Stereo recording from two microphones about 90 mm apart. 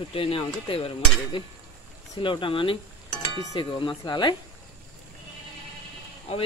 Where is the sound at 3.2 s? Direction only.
60° left (ahead or behind).